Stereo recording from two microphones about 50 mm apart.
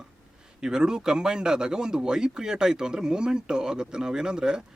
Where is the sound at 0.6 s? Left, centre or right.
Centre.